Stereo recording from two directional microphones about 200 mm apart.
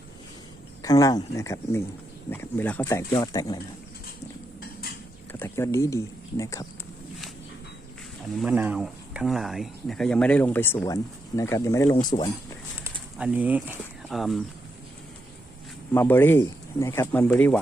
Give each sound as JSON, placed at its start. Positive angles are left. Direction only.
{"t": 0.8, "sound": "speech", "side_deg": 15}
{"t": 5.3, "sound": "speech", "side_deg": 10}
{"t": 8.4, "sound": "speech", "side_deg": -5}
{"t": 12.1, "sound": "speech", "side_deg": 30}
{"t": 12.8, "sound": "a sound", "side_deg": -5}
{"t": 15.9, "sound": "speech", "side_deg": 10}